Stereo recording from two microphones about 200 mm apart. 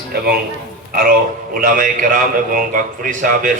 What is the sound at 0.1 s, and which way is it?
A man's voice, 50° right (ahead or behind).